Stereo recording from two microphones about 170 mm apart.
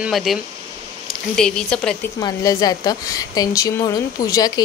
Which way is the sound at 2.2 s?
20° left (ahead or behind).